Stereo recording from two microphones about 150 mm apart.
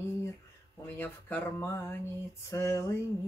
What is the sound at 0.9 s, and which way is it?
Speech, 15° left (ahead or behind).